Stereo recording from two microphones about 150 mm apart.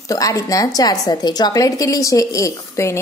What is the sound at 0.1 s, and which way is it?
A woman's voice, 20° left (ahead or behind).